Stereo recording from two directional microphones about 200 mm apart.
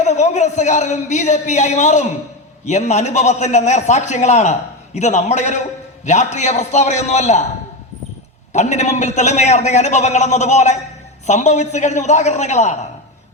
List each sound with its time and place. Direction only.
0.0 s a man's voice: 35° left (ahead or behind)
8.5 s a man's voice: 35° left (ahead or behind)